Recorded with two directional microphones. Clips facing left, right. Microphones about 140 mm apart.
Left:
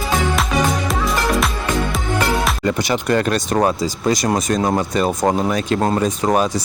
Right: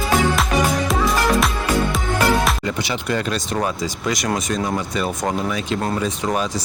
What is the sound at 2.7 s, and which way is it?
Speech, 45° left (ahead or behind).